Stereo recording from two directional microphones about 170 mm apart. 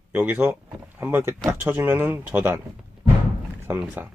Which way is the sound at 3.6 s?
10° right (ahead or behind).